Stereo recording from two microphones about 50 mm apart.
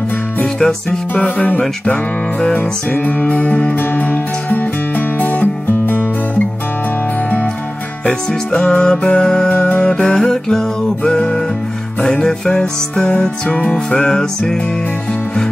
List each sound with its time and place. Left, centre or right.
0.6 s music: centre
1.1 s music: left
8.1 s music: centre
9.5 s music: left
9.9 s music: centre
13.1 s music: left
14.1 s music: centre